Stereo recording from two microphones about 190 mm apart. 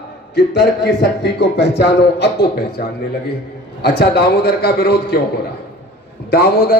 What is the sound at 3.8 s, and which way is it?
Speech, 55° left (ahead or behind).